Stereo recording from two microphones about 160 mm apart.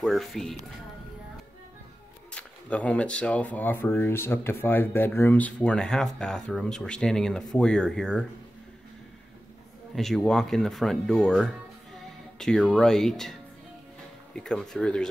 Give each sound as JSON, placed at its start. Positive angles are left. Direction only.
{"t": 0.0, "sound": "speech", "side_deg": 0}
{"t": 2.3, "sound": "speech", "side_deg": 10}
{"t": 9.9, "sound": "speech", "side_deg": 0}